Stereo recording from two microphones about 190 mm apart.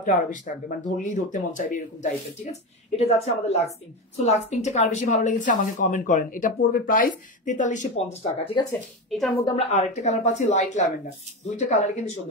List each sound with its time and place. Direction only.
0.0 s a woman's voice: 45° left (ahead or behind)